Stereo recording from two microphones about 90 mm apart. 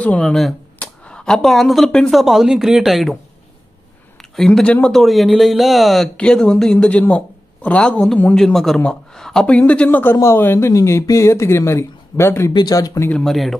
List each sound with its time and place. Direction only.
0.0 s speech: 10° left (ahead or behind)
0.7 s a sound: 10° left (ahead or behind)
2.0 s speech: centre (ahead or behind)
4.2 s speech: 5° left (ahead or behind); by 12.5 s 30° left (ahead or behind)
12.5 s speech: 45° left (ahead or behind)
13.2 s speech: centre (ahead or behind)